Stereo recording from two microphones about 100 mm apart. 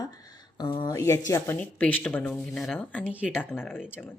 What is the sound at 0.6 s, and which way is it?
Speech, 50° left (ahead or behind).